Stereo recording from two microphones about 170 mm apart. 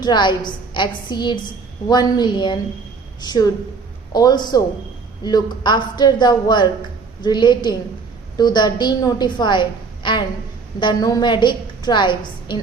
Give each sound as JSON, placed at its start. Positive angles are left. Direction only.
{"t": 0.0, "sound": "a woman's voice", "side_deg": 25}